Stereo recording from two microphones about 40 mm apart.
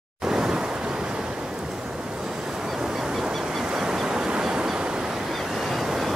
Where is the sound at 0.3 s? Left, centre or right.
Centre.